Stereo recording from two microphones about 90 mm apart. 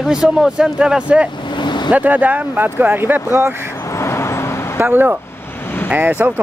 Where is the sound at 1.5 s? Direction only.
55° left (ahead or behind).